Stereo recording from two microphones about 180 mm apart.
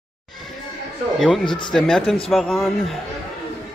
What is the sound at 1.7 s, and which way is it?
A man's voice, 5° left (ahead or behind).